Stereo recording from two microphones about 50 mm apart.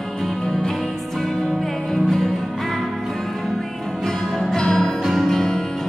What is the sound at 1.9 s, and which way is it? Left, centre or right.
Music, centre.